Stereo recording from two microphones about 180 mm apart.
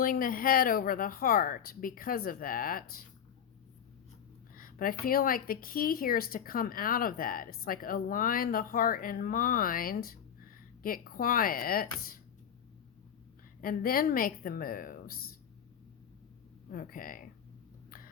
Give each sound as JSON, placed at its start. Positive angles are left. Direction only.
{"t": 0.0, "sound": "speech", "side_deg": 50}
{"t": 4.5, "sound": "speech", "side_deg": 50}
{"t": 13.6, "sound": "speech", "side_deg": 55}
{"t": 16.7, "sound": "speech", "side_deg": 50}